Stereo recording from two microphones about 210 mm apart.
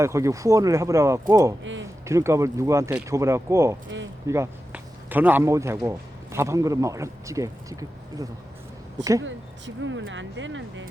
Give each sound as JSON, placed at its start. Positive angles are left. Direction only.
{"t": 0.0, "sound": "a man's voice", "side_deg": -15}
{"t": 1.6, "sound": "speech", "side_deg": -60}
{"t": 2.0, "sound": "a man's voice", "side_deg": -15}
{"t": 3.8, "sound": "a sound", "side_deg": -60}
{"t": 4.3, "sound": "a man's voice", "side_deg": -10}
{"t": 9.2, "sound": "speech", "side_deg": -65}